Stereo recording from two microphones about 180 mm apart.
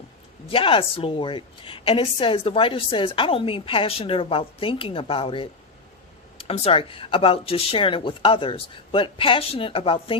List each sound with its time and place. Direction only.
0.4 s a woman's voice: 30° left (ahead or behind)